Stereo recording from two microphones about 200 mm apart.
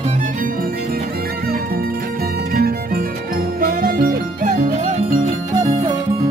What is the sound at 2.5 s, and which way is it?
Music, 50° right (ahead or behind).